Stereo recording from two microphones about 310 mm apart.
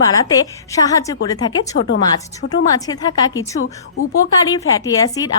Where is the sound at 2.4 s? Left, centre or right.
Left.